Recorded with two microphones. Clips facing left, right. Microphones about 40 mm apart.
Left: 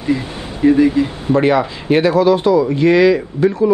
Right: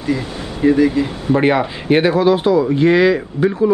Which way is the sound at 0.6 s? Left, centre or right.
Centre.